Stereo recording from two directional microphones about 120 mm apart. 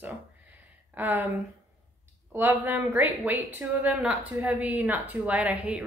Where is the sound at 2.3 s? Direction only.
20° right (ahead or behind).